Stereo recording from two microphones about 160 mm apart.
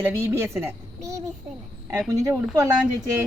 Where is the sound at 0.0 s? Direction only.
15° right (ahead or behind).